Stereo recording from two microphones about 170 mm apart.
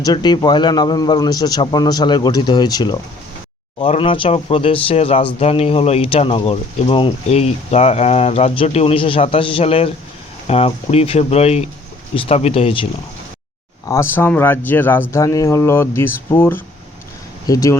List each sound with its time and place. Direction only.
0.0 s a man's voice: 25° left (ahead or behind)
13.8 s speech: 15° left (ahead or behind)